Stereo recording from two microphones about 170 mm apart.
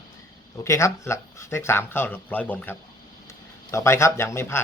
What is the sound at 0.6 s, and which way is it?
Speech, 15° left (ahead or behind).